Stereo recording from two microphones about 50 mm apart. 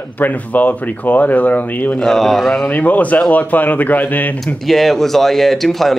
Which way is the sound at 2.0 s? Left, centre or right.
Centre.